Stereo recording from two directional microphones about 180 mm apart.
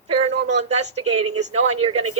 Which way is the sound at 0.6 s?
35° right (ahead or behind).